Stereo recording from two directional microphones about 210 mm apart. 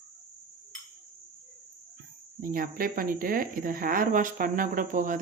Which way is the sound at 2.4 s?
40° right (ahead or behind).